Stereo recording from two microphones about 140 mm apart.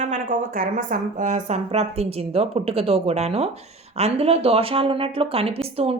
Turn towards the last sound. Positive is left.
turn(degrees=-45)  # may be behind; listen again after turning